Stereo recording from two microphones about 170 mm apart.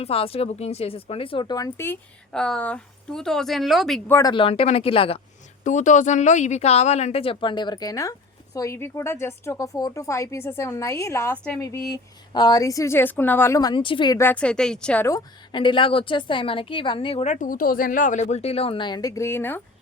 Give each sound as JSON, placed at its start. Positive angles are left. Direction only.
{"t": 0.0, "sound": "speech", "side_deg": 35}
{"t": 4.1, "sound": "a woman's voice", "side_deg": 25}
{"t": 5.6, "sound": "a woman's voice", "side_deg": 45}
{"t": 14.2, "sound": "a woman's voice", "side_deg": 10}
{"t": 15.0, "sound": "a woman's voice", "side_deg": 25}